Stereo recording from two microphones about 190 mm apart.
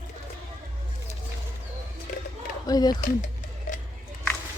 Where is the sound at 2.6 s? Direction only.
20° left (ahead or behind).